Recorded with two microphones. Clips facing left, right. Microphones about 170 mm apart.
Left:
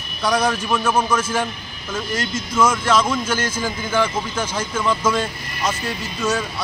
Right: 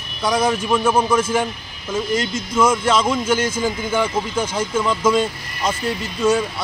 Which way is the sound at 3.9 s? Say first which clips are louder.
Left 2 dB; 10° right (ahead or behind).